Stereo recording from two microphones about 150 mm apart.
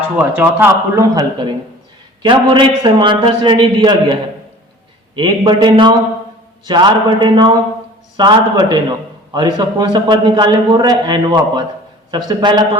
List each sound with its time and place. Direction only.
0.2 s speech: 15° right (ahead or behind)
2.2 s a man's voice: 30° right (ahead or behind)